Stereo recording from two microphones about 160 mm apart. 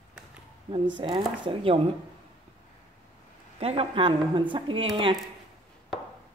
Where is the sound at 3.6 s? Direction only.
40° right (ahead or behind).